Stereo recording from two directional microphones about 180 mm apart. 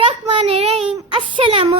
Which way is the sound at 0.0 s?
35° right (ahead or behind).